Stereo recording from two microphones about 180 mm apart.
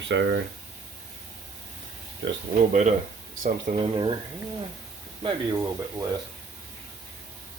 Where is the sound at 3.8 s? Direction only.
25° right (ahead or behind).